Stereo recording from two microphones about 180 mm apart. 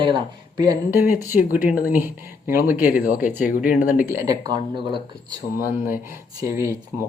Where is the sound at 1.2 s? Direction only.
15° right (ahead or behind).